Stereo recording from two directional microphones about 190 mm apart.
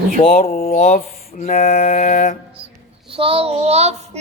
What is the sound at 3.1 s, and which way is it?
Child singing, 30° right (ahead or behind).